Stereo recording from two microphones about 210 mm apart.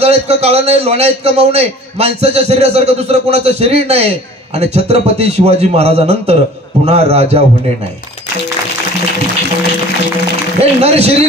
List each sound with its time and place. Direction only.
0.0 s a man's voice: 30° right (ahead or behind)
10.6 s a man's voice: 30° right (ahead or behind)